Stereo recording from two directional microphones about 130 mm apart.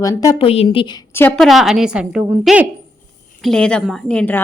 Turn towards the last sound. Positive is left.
turn(degrees=10)  # may be behind; listen again after turning